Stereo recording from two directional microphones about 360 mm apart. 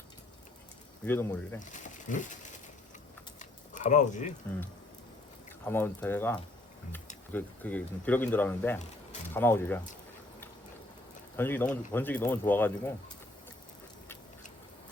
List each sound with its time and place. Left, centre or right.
1.0 s speech: centre
1.7 s a sound: left
5.6 s speech: centre
11.3 s speech: centre